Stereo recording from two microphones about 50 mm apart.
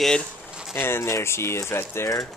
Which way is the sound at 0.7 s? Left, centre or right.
Left.